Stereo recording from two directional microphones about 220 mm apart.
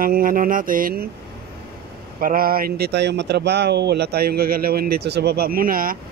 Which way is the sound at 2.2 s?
40° right (ahead or behind).